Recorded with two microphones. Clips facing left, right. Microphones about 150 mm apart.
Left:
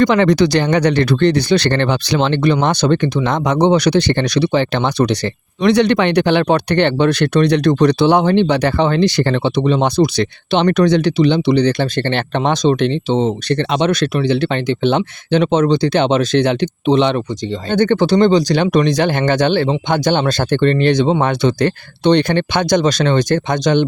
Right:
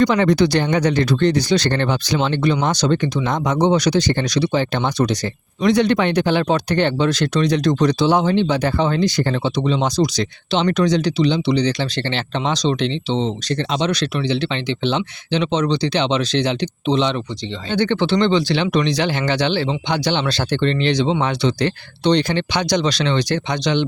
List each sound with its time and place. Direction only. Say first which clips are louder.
0.0 s speech: left 3 dB; 80° left; by 17.2 s 55° left (ahead or behind)
17.7 s speech: left 5 dB; 45° left (ahead or behind)